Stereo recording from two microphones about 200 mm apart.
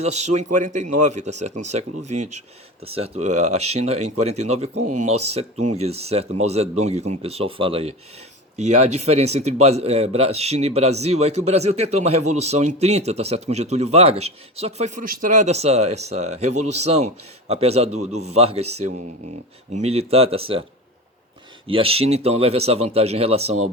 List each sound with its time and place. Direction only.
0.0 s speech: 35° right (ahead or behind)
21.7 s speech: 30° right (ahead or behind)